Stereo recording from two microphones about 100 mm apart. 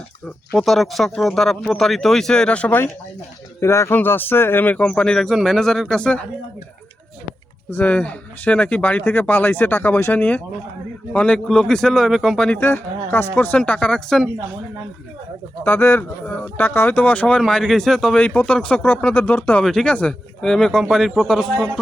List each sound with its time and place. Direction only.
0.5 s speech: centre (ahead or behind)
7.7 s speech: 15° left (ahead or behind); by 12.5 s centre (ahead or behind)
12.5 s speech: 20° left (ahead or behind)
13.6 s speech: 10° left (ahead or behind)
15.6 s speech: 20° left (ahead or behind)
17.4 s speech: centre (ahead or behind)